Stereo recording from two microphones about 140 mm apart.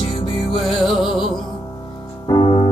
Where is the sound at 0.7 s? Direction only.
40° left (ahead or behind).